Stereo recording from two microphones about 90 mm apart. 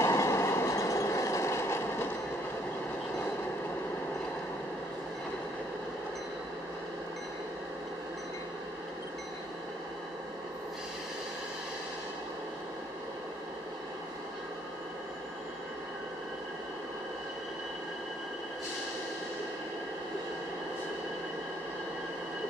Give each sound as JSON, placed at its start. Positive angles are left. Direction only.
{"t": 0.0, "sound": "vehicle", "side_deg": 35}